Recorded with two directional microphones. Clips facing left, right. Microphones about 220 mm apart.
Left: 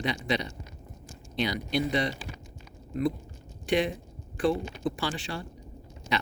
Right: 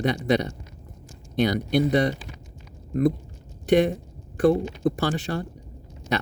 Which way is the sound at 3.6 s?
45° right (ahead or behind).